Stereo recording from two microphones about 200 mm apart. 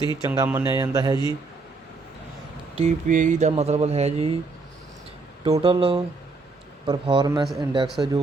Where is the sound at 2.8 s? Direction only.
40° right (ahead or behind).